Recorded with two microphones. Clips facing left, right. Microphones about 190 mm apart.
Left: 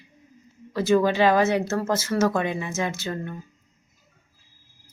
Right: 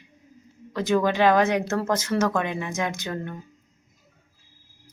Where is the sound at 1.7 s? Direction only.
5° left (ahead or behind).